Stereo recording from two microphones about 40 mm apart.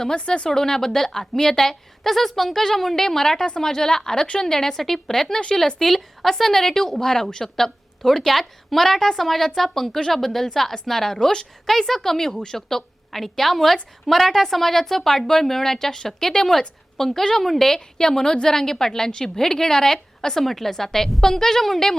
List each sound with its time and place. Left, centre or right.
0.2 s speech: left
0.4 s a woman's voice: centre
11.7 s a woman's voice: centre